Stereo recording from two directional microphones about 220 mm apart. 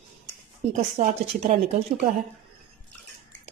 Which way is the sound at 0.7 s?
35° right (ahead or behind).